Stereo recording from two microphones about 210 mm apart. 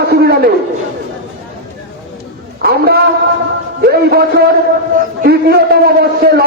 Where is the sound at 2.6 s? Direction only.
45° right (ahead or behind).